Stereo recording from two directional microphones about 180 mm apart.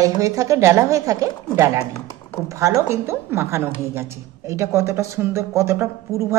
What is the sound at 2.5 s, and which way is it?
A woman's voice, 15° right (ahead or behind).